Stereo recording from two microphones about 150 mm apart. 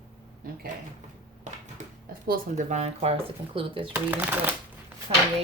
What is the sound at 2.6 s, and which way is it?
Speech, 50° right (ahead or behind).